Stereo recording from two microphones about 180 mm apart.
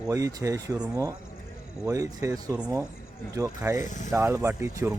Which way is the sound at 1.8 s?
15° right (ahead or behind).